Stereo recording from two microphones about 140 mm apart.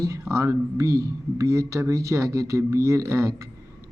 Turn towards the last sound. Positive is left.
turn(degrees=-20)  # may be behind; listen again after turning